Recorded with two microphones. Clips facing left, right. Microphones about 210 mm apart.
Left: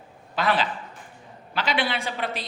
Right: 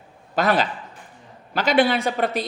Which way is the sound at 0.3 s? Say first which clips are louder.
Right 4 dB; 45° right (ahead or behind).